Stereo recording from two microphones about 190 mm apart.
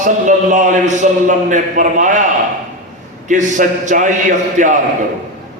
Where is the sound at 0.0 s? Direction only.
40° right (ahead or behind).